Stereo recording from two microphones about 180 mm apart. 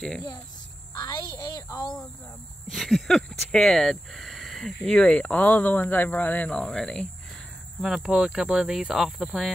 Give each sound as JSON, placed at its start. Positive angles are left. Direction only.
{"t": 0.9, "sound": "a woman's voice", "side_deg": 20}
{"t": 2.7, "sound": "speech", "side_deg": 0}